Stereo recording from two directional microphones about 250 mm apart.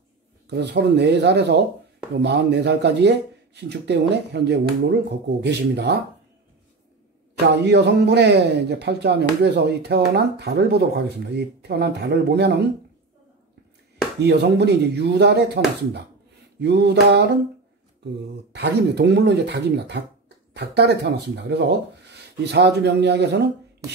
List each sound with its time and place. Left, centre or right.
0.5 s speech: right
7.4 s a man's voice: right
14.2 s a man's voice: right
18.5 s a man's voice: right